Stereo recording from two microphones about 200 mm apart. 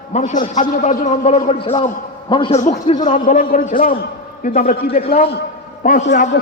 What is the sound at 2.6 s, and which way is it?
A man's voice, 35° left (ahead or behind).